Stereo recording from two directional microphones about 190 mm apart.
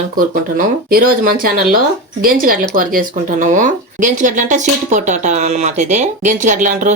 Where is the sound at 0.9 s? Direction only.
50° right (ahead or behind).